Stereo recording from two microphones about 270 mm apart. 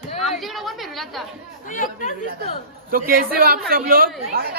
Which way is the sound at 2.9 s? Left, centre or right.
Right.